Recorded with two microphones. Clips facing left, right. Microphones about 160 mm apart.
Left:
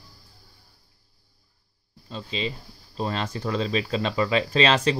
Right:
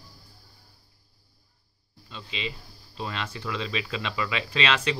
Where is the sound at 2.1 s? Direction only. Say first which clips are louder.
Left 5 dB; 35° left (ahead or behind).